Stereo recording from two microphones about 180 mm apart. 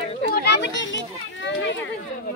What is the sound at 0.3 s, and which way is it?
Children playing, 70° left (ahead or behind).